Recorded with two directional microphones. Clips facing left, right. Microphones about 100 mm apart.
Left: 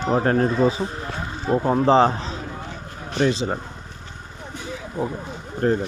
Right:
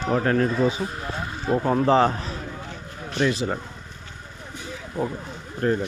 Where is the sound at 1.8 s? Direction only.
25° left (ahead or behind).